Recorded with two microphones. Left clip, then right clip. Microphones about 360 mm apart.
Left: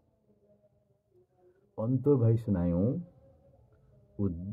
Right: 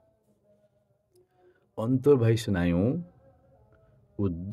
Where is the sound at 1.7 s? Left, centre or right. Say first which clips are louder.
Right 5 dB; right.